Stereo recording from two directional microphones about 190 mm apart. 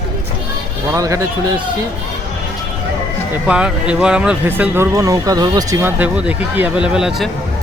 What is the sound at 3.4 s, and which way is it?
Speech, 5° right (ahead or behind).